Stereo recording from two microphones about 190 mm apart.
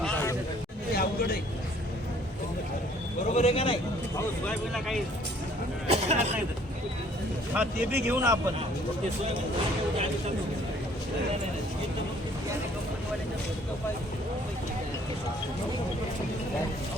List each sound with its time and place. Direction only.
0.0 s hubbub: 10° left (ahead or behind)
0.9 s a sound: 55° left (ahead or behind)
3.2 s a man's voice: 35° left (ahead or behind)
4.4 s speech: centre (ahead or behind)
5.9 s speech: 35° right (ahead or behind)
7.5 s speech: 10° right (ahead or behind)